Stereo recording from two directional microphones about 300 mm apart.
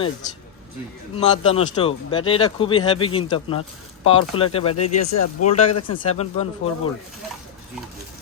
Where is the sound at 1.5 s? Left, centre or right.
Centre.